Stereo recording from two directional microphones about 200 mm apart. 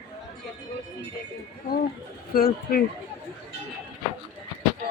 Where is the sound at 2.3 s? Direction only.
45° left (ahead or behind).